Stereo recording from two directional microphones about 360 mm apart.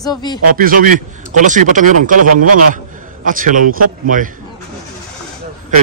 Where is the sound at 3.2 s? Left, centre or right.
Right.